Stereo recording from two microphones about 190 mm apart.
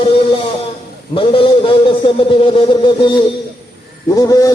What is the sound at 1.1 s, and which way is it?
A man's voice, 25° left (ahead or behind).